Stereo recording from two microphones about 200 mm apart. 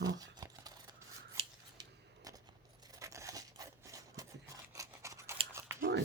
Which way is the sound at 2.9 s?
15° right (ahead or behind).